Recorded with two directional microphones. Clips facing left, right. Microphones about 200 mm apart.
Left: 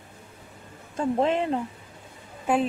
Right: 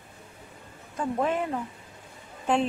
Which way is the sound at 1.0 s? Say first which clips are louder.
Left 4 dB; 25° left (ahead or behind).